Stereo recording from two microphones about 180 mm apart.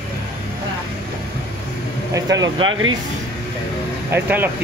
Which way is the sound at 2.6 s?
90° right.